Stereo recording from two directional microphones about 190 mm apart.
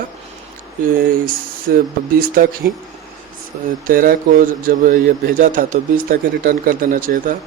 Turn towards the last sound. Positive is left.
turn(degrees=-45)  # may be behind; listen again after turning